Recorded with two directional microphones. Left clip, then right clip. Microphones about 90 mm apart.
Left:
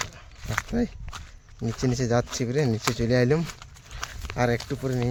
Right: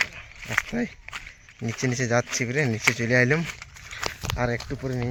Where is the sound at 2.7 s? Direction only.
5° right (ahead or behind).